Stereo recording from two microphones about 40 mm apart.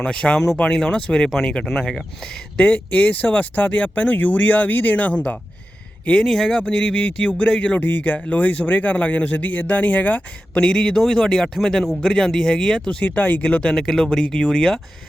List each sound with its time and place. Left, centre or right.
0.0 s speech: left
1.3 s speech: centre
2.6 s speech: left
6.7 s speech: left
7.8 s speech: left
10.6 s speech: left
13.1 s speech: left
13.7 s speech: centre